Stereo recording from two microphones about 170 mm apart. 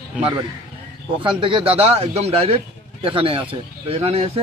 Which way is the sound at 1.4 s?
30° right (ahead or behind).